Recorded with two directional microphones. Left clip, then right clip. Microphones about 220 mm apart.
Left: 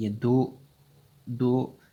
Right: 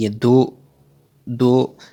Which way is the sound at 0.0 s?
40° right (ahead or behind).